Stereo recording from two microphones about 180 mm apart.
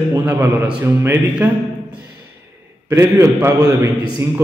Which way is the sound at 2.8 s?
15° right (ahead or behind).